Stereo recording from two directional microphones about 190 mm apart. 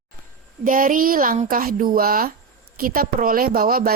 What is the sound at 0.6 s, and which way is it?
A woman's voice, 45° right (ahead or behind).